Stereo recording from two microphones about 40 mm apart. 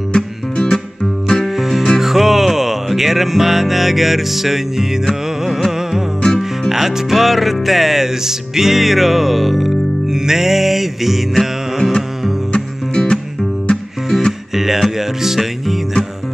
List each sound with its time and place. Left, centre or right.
0.1 s music: centre
1.0 s music: centre
6.2 s music: centre
6.7 s music: centre
10.1 s music: centre
12.5 s music: left
14.5 s music: centre